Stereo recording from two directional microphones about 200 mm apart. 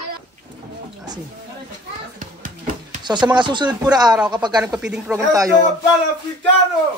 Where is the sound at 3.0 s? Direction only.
20° right (ahead or behind).